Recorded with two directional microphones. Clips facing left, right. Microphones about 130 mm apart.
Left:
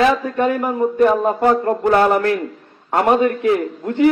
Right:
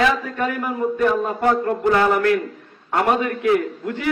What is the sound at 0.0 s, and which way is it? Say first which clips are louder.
A man's voice: left 4 dB; 30° left (ahead or behind).